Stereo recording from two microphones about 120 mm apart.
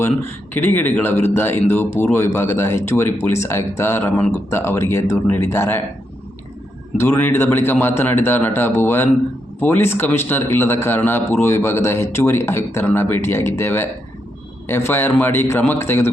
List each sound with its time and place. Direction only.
0.0 s a man's voice: 15° left (ahead or behind)
7.0 s a man's voice: 15° left (ahead or behind)